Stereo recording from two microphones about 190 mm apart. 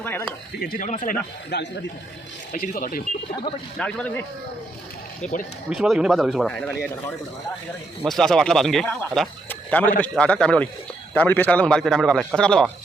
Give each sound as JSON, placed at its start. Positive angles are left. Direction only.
{"t": 0.0, "sound": "a sound", "side_deg": 10}
{"t": 0.6, "sound": "speech", "side_deg": 45}
{"t": 3.8, "sound": "speech", "side_deg": 5}
{"t": 5.7, "sound": "speech", "side_deg": 0}
{"t": 8.0, "sound": "speech", "side_deg": 0}
{"t": 9.5, "sound": "a sound", "side_deg": 10}
{"t": 10.0, "sound": "speech", "side_deg": 5}